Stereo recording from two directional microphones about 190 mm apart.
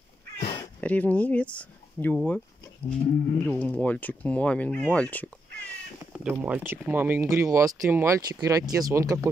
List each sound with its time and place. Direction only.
0.4 s cat: 30° left (ahead or behind)
0.7 s speech: 10° left (ahead or behind)
3.4 s speech: 10° left (ahead or behind)
6.1 s speech: 5° right (ahead or behind)